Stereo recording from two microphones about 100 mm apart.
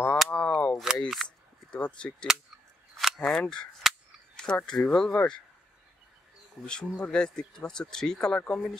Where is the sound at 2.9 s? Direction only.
5° left (ahead or behind).